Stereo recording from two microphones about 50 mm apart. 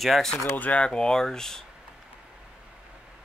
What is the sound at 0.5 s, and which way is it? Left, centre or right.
Speech, left.